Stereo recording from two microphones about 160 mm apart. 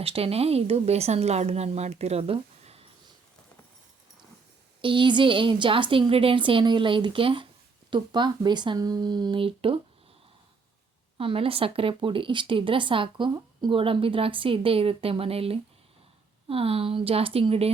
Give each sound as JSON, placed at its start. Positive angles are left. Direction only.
{"t": 0.0, "sound": "speech", "side_deg": -35}
{"t": 4.8, "sound": "speech", "side_deg": -30}
{"t": 11.2, "sound": "speech", "side_deg": -35}